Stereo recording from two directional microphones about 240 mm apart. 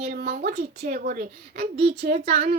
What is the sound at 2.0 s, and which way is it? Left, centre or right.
Speech, right.